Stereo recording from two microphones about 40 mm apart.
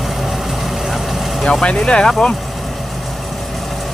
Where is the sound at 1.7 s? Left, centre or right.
Centre.